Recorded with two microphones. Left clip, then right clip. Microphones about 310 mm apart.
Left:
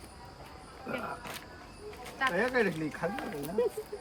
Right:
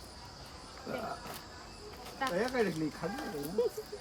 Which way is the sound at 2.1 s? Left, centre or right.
Centre.